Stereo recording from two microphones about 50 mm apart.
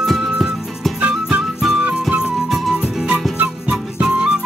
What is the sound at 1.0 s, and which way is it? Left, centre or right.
Music, right.